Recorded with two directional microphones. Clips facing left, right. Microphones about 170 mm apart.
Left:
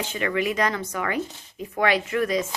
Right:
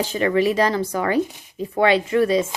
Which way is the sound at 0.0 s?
35° right (ahead or behind).